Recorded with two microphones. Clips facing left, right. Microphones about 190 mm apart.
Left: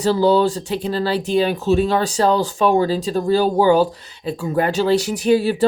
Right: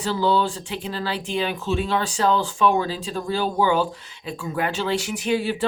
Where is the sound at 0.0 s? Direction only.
40° left (ahead or behind).